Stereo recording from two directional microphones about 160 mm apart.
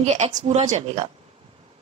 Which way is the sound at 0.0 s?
40° right (ahead or behind).